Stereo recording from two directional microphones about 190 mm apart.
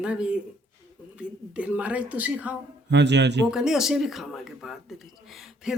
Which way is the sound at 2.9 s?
65° right (ahead or behind).